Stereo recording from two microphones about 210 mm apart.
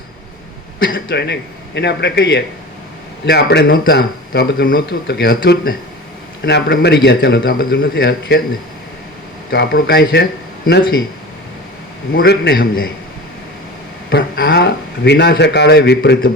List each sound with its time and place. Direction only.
0.8 s a man's voice: 45° left (ahead or behind)
9.5 s speech: 45° left (ahead or behind)
12.1 s speech: 50° left (ahead or behind)
14.1 s a man's voice: 50° left (ahead or behind)